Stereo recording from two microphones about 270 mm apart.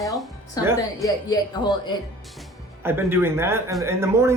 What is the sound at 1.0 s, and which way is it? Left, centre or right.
Speech, centre.